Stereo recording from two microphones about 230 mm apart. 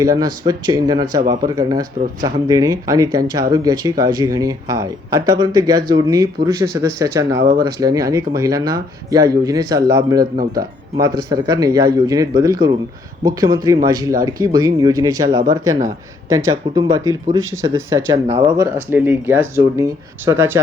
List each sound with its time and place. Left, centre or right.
0.0 s speech: centre
10.3 s speech: right
11.0 s speech: centre